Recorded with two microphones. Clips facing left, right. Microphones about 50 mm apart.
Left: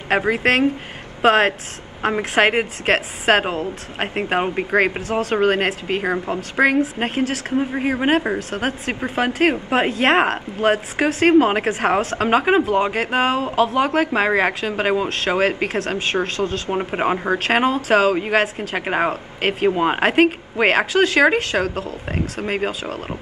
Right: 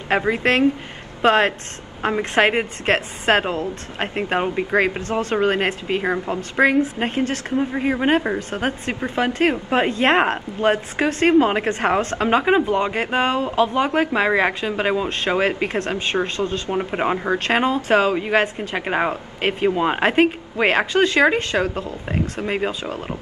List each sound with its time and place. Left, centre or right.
0.1 s a woman's voice: centre
4.9 s speech: centre
5.4 s a woman's voice: centre
16.7 s a woman's voice: centre
22.0 s a woman's voice: centre